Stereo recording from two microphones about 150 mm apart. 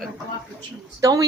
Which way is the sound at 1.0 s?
25° right (ahead or behind).